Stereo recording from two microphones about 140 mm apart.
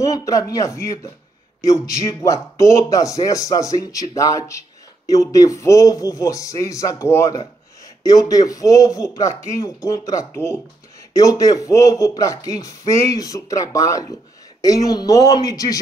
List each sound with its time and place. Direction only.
0.0 s speech: 25° left (ahead or behind)